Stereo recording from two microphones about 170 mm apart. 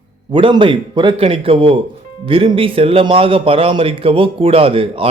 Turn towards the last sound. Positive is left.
turn(degrees=-35)  # may be behind; listen again after turning